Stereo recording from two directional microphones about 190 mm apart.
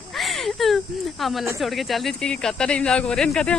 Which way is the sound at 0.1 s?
Centre (ahead or behind).